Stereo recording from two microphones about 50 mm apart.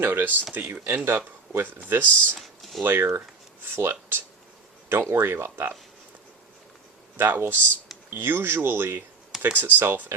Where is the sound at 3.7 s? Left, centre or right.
Right.